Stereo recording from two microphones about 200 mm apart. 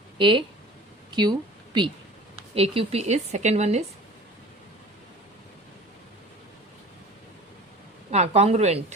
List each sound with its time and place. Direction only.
0.2 s speech: 25° right (ahead or behind)
1.1 s a sound: 20° right (ahead or behind)
2.6 s speech: 30° right (ahead or behind)
8.1 s speech: 35° right (ahead or behind)